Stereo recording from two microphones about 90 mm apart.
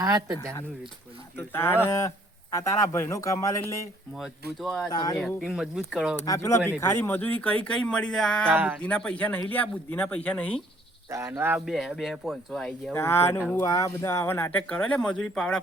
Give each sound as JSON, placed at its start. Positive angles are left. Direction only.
{"t": 0.0, "sound": "speech", "side_deg": -45}
{"t": 1.5, "sound": "speech", "side_deg": 25}
{"t": 4.1, "sound": "speech", "side_deg": 0}
{"t": 4.9, "sound": "speech", "side_deg": 45}
{"t": 5.4, "sound": "speech", "side_deg": -5}
{"t": 6.2, "sound": "speech", "side_deg": 35}
{"t": 8.4, "sound": "speech", "side_deg": -20}
{"t": 8.8, "sound": "speech", "side_deg": 15}
{"t": 11.1, "sound": "speech", "side_deg": -30}
{"t": 11.5, "sound": "speech", "side_deg": 0}
{"t": 12.9, "sound": "speech", "side_deg": 30}
{"t": 14.7, "sound": "speech", "side_deg": 10}